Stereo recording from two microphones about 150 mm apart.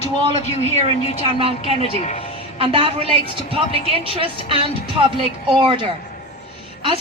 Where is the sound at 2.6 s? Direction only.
40° right (ahead or behind).